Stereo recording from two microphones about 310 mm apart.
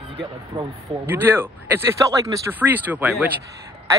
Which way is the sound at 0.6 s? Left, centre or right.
Centre.